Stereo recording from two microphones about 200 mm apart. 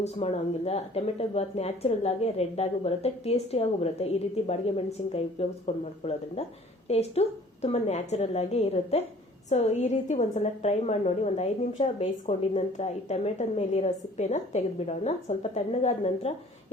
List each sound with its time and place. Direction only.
0.0 s a woman's voice: 30° left (ahead or behind)